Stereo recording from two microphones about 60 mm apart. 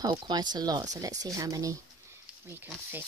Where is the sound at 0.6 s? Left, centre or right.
Right.